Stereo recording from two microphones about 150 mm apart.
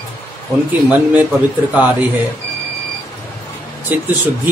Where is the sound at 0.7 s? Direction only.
10° right (ahead or behind).